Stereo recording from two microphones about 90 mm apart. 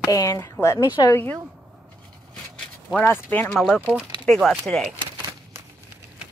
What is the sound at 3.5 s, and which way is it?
Speech, 10° left (ahead or behind).